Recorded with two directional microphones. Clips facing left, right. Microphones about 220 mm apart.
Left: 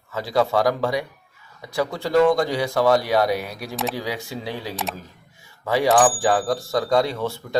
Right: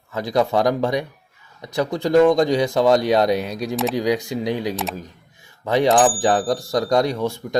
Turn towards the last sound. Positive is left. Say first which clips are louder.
# right 3 dB
turn(degrees=-15)  # may be behind; listen again after turning